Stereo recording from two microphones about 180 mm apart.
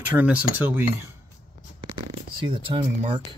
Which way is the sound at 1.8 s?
25° right (ahead or behind).